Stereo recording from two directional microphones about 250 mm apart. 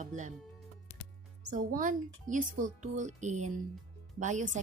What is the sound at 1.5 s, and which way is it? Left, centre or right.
A woman's voice, right.